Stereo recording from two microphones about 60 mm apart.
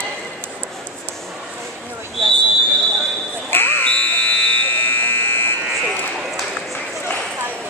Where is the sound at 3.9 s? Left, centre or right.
Left.